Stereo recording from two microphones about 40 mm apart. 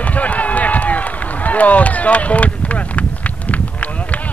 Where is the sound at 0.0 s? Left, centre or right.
Left.